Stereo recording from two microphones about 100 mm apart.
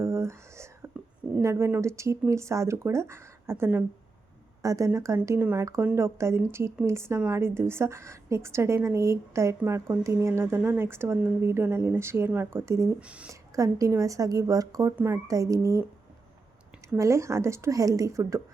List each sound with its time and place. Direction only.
0.0 s whispering: 25° right (ahead or behind)
1.4 s speech: 30° right (ahead or behind)
4.6 s speech: 35° right (ahead or behind)
13.0 s speech: 10° right (ahead or behind)
13.2 s speech: 35° right (ahead or behind)
17.0 s speech: 30° right (ahead or behind)